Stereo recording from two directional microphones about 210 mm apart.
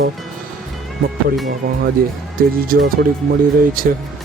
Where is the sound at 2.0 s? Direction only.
45° right (ahead or behind).